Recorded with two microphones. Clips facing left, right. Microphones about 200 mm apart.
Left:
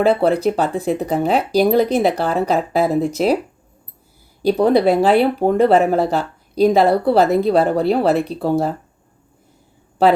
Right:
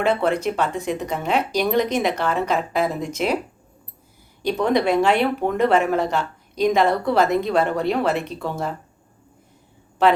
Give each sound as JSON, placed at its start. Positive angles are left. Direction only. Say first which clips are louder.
{"t": 0.0, "sound": "speech", "louder": "left 5 dB", "side_deg": 35}
{"t": 4.4, "sound": "speech", "louder": "left 6 dB", "side_deg": 35}
{"t": 10.0, "sound": "speech", "louder": "left 3 dB", "side_deg": 35}